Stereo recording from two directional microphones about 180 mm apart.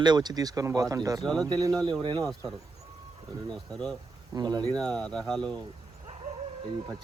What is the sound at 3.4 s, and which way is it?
Speech, 5° left (ahead or behind).